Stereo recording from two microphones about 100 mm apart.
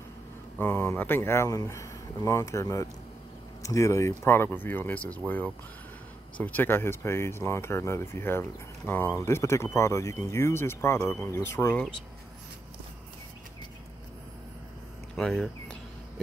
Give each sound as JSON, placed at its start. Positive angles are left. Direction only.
{"t": 0.6, "sound": "speech", "side_deg": 20}
{"t": 6.3, "sound": "speech", "side_deg": 15}
{"t": 15.1, "sound": "speech", "side_deg": 0}